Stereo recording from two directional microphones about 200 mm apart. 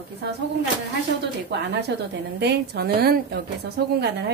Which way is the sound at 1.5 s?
55° right (ahead or behind).